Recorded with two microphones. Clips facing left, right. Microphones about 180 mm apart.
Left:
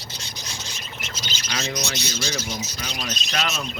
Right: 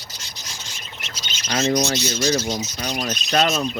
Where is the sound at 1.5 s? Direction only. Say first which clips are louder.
Right 9 dB; 40° right (ahead or behind).